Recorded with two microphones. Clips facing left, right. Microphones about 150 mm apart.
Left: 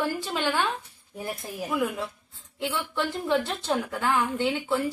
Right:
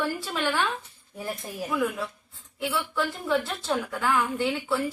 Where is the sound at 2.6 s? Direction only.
25° left (ahead or behind).